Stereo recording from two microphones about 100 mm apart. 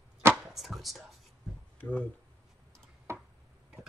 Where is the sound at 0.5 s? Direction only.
Centre (ahead or behind).